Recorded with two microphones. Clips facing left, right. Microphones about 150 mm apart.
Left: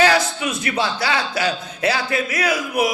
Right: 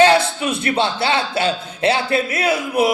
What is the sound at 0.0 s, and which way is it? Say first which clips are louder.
A man's voice: right 4 dB; 25° right (ahead or behind).